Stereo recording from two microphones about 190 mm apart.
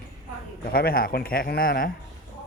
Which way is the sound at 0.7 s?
50° left (ahead or behind).